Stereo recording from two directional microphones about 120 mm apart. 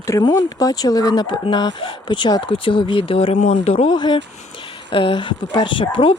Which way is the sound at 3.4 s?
60° left (ahead or behind).